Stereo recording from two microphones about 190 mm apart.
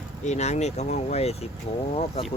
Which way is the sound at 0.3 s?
35° left (ahead or behind).